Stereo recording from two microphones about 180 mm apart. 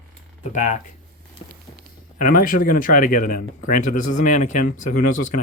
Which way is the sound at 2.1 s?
50° left (ahead or behind).